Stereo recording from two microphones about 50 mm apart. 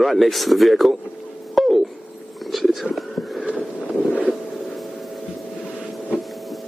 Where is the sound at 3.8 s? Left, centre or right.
Left.